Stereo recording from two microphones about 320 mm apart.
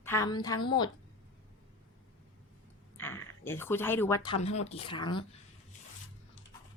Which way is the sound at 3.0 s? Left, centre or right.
Centre.